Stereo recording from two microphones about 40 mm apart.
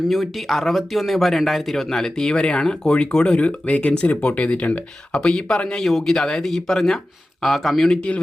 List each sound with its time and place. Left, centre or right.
0.1 s speech: centre
3.2 s speech: left
5.1 s speech: left
5.8 s speech: centre
7.4 s speech: centre